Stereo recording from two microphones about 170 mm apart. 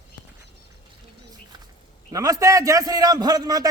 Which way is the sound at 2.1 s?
20° right (ahead or behind).